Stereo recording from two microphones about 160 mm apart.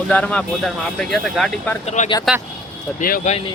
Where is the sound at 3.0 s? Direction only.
55° left (ahead or behind).